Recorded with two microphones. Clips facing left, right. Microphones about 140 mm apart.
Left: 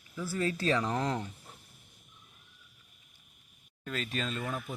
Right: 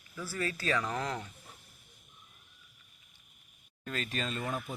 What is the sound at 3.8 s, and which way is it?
Speech, centre (ahead or behind).